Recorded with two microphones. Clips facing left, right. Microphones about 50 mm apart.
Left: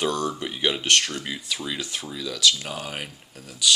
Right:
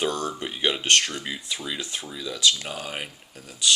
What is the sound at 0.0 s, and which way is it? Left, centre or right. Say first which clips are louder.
Speech: left 1 dB; right.